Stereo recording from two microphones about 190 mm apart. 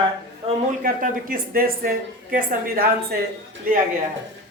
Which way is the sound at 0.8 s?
45° right (ahead or behind).